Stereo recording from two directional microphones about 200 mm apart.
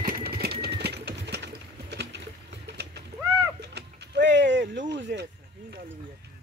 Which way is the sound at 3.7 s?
60° right (ahead or behind).